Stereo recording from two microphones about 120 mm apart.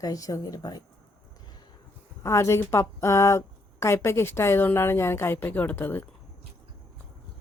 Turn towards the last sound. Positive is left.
turn(degrees=15)  # may be behind; listen again after turning